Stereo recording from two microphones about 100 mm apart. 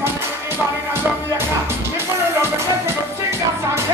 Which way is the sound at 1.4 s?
25° right (ahead or behind).